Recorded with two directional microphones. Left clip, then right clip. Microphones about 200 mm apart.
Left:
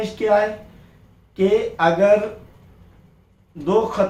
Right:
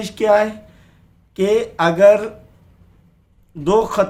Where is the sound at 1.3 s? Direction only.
50° right (ahead or behind).